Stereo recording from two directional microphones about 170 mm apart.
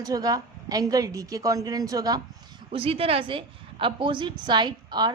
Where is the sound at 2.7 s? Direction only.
35° right (ahead or behind).